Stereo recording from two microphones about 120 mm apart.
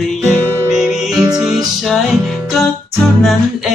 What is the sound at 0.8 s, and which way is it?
Music, 5° right (ahead or behind).